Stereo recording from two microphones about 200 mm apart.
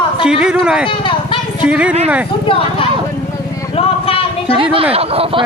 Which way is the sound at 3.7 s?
30° left (ahead or behind).